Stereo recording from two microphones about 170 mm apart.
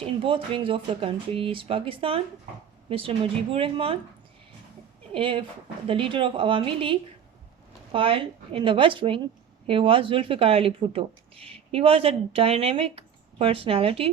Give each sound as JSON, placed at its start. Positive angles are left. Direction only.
{"t": 0.0, "sound": "speech", "side_deg": -30}
{"t": 5.1, "sound": "speech", "side_deg": -30}